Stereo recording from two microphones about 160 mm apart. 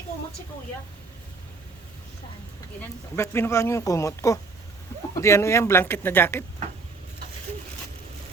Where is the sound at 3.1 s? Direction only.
15° left (ahead or behind).